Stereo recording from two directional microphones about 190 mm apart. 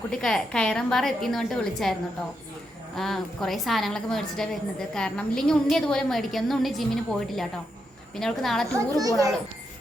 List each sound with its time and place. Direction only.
0.1 s a woman's voice: 5° left (ahead or behind)
8.9 s a child's voice: 20° right (ahead or behind)